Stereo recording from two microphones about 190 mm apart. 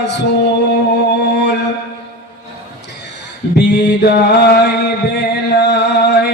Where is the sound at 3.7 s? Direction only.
60° left (ahead or behind).